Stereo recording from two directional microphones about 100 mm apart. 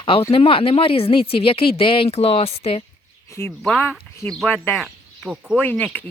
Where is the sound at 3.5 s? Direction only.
10° left (ahead or behind).